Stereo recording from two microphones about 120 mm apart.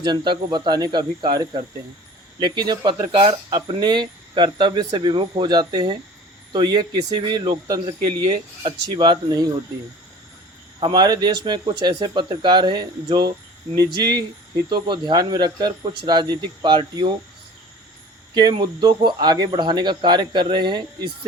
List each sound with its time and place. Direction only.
0.0 s speech: 40° right (ahead or behind)
10.8 s speech: 35° right (ahead or behind)
18.3 s speech: 35° right (ahead or behind)